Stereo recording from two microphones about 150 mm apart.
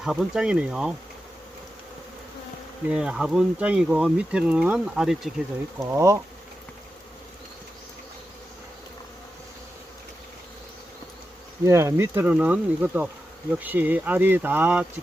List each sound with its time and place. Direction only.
0.0 s speech: centre (ahead or behind)
2.9 s speech: 5° right (ahead or behind)
5.8 s speech: 20° right (ahead or behind)
11.6 s speech: 20° right (ahead or behind)